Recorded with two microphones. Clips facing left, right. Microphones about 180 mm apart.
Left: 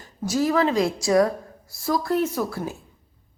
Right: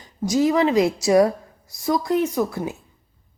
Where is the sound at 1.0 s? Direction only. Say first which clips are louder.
Right 1 dB; 25° right (ahead or behind).